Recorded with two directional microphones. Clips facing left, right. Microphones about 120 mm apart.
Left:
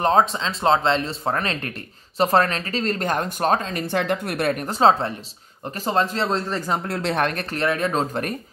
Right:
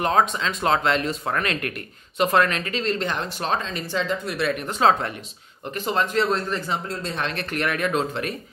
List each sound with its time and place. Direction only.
0.0 s speech: 30° left (ahead or behind)
6.9 s speech: 70° left (ahead or behind)
7.5 s speech: 30° left (ahead or behind)